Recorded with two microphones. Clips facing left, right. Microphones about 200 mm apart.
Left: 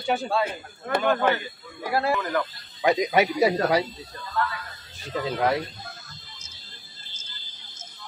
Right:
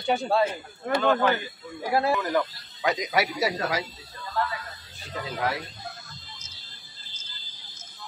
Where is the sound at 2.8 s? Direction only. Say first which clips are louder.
Left 5 dB; 25° left (ahead or behind).